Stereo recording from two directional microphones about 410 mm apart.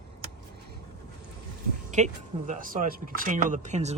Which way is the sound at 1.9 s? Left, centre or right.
Centre.